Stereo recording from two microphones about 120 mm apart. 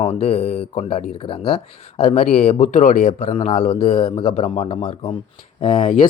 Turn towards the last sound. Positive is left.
turn(degrees=55)  # may be behind; listen again after turning